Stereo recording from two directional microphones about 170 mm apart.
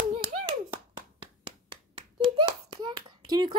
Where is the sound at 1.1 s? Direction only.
30° right (ahead or behind).